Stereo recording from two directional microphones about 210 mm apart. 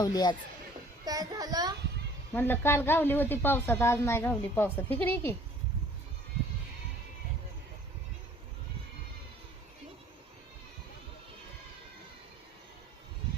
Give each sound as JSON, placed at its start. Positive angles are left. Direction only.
{"t": 0.0, "sound": "speech", "side_deg": 20}
{"t": 1.0, "sound": "a child's voice", "side_deg": -20}
{"t": 2.3, "sound": "a woman's voice", "side_deg": 10}